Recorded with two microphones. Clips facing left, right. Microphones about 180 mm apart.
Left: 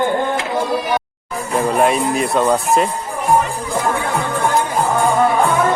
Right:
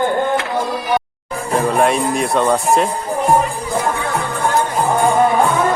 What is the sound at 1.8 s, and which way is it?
Speech, centre (ahead or behind).